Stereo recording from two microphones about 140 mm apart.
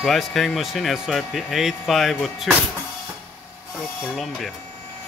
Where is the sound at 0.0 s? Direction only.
Centre (ahead or behind).